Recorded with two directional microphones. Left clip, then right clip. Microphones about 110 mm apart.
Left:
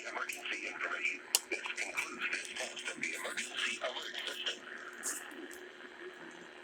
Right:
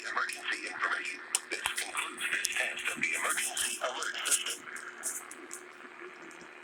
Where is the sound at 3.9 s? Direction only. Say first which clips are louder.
Right 6 dB; 65° right (ahead or behind).